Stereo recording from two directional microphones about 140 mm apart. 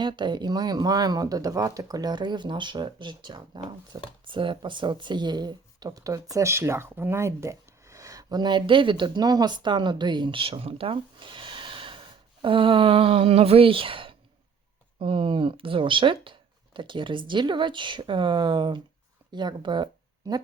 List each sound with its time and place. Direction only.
0.0 s speech: 35° right (ahead or behind)